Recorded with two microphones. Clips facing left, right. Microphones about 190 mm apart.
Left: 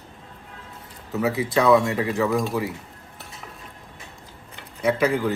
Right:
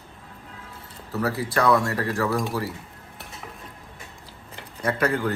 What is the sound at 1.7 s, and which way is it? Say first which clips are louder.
Speech: left 4 dB; 20° left (ahead or behind).